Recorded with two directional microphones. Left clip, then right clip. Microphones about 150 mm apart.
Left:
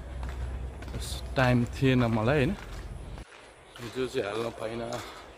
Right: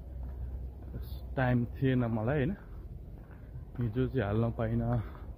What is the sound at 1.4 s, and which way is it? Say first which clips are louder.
A man's voice: left 6 dB; 15° left (ahead or behind).